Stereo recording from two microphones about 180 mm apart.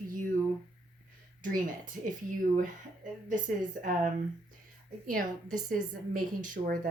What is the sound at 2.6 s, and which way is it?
Speech, 45° right (ahead or behind).